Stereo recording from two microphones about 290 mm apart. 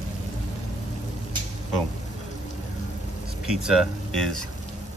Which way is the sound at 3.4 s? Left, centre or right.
Centre.